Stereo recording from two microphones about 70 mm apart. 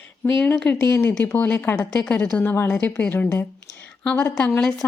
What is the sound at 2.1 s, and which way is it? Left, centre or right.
A woman's voice, left.